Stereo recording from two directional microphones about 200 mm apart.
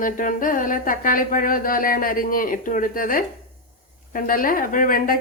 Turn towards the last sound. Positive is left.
turn(degrees=45)  # may be behind; listen again after turning